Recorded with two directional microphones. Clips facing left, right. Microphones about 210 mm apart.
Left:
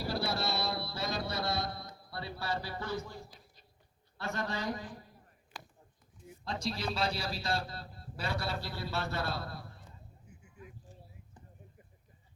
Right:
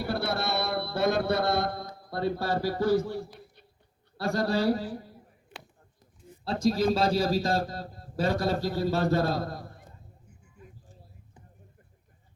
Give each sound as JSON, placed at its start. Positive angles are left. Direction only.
{"t": 0.0, "sound": "mantra", "side_deg": -60}
{"t": 3.3, "sound": "a sound", "side_deg": -60}
{"t": 4.2, "sound": "a man's voice", "side_deg": -35}
{"t": 6.7, "sound": "a man's voice", "side_deg": -45}